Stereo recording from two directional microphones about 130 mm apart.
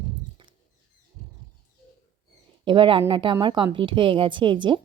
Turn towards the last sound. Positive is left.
turn(degrees=-40)  # may be behind; listen again after turning